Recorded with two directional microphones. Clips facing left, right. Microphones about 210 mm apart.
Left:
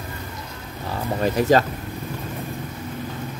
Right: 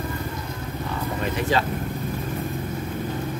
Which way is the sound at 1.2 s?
40° left (ahead or behind).